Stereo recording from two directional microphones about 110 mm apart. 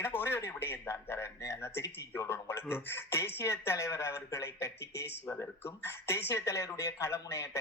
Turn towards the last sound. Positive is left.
turn(degrees=25)  # may be behind; listen again after turning